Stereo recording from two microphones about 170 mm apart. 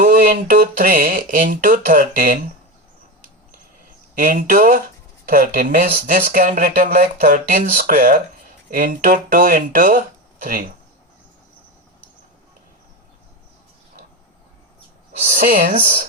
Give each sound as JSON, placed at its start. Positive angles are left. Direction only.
{"t": 0.0, "sound": "speech", "side_deg": -55}
{"t": 4.1, "sound": "speech", "side_deg": -55}
{"t": 15.3, "sound": "speech", "side_deg": -55}